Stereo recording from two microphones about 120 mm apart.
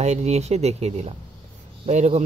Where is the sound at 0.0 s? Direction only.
65° right (ahead or behind).